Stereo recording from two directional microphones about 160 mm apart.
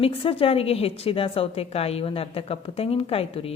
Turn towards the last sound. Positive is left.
turn(degrees=40)  # may be behind; listen again after turning